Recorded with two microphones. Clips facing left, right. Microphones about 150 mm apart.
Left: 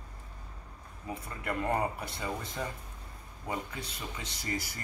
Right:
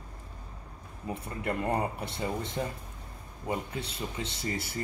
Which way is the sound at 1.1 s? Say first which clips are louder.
Right 3 dB; 25° right (ahead or behind).